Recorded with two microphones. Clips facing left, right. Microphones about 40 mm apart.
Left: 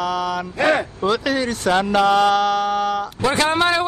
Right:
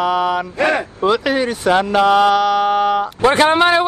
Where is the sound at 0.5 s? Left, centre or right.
Centre.